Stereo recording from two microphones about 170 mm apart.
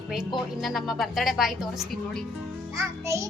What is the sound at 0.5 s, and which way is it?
A woman's voice, centre (ahead or behind).